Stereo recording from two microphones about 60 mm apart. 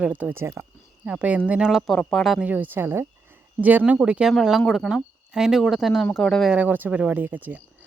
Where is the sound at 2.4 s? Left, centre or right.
Right.